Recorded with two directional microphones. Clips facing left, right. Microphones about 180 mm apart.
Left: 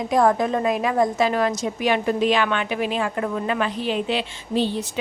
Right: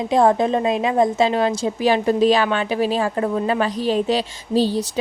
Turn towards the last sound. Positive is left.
turn(degrees=-35)  # may be behind; listen again after turning